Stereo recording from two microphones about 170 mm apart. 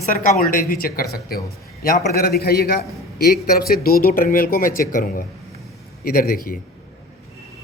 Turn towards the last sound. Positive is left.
turn(degrees=60)  # may be behind; listen again after turning